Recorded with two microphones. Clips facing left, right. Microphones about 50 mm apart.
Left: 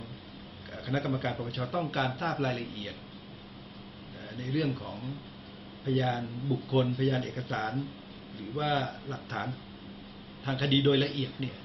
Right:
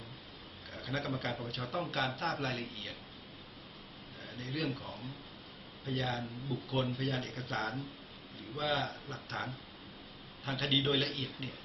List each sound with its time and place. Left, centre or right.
0.7 s a man's voice: centre
4.4 s speech: centre
7.5 s speech: left
8.5 s speech: centre
10.4 s speech: centre